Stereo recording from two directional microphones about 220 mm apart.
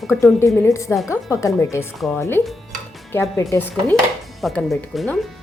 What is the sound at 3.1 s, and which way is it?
Speech, 10° left (ahead or behind).